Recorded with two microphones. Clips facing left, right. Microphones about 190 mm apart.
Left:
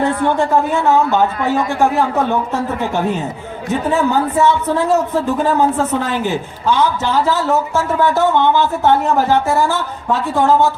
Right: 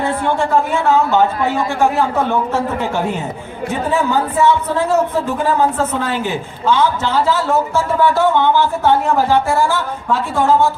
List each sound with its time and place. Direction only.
0.3 s speech: 15° left (ahead or behind)
4.4 s speech: 15° left (ahead or behind)
6.1 s a woman's voice: 15° right (ahead or behind)
7.3 s speech: 15° left (ahead or behind)